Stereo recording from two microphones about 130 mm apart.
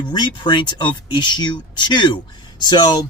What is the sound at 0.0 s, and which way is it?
Speech, 35° left (ahead or behind).